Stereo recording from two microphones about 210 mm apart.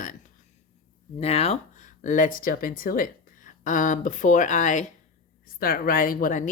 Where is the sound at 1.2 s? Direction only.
30° left (ahead or behind).